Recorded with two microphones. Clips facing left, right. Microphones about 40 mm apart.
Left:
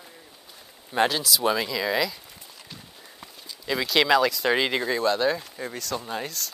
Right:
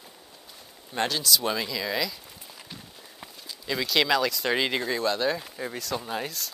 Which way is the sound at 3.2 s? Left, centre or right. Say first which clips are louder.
Left 1 dB; centre.